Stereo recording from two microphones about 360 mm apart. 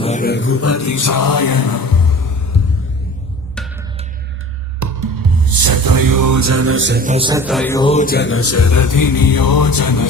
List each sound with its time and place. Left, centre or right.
0.0 s music: left
4.8 s music: right; by 10.1 s left